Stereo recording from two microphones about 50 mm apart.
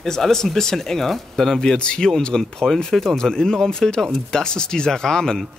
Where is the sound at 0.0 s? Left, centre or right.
Centre.